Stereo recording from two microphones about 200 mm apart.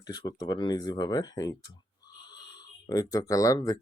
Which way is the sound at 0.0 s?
20° left (ahead or behind).